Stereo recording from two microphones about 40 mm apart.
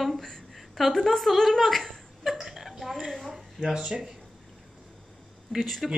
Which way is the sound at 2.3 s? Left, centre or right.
Centre.